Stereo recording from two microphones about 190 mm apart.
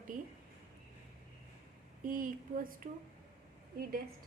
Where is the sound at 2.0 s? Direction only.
45° right (ahead or behind).